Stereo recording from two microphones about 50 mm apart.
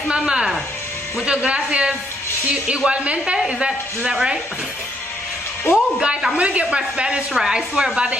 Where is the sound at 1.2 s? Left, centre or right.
Centre.